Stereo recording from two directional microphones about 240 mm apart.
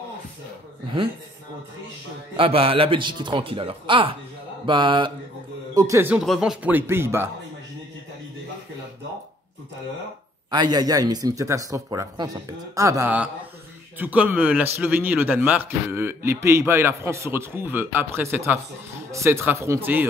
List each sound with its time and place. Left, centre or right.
2.3 s a man's voice: right
10.5 s a man's voice: centre